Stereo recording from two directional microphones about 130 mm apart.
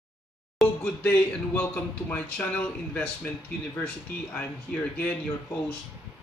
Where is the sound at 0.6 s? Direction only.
10° left (ahead or behind).